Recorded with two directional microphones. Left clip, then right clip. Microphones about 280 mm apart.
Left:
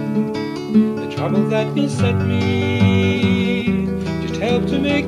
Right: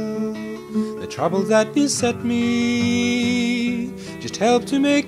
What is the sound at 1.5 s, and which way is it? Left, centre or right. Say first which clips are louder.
Music: right 2 dB; right.